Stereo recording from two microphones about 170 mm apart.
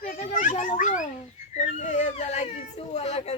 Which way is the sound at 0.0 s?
50° left (ahead or behind).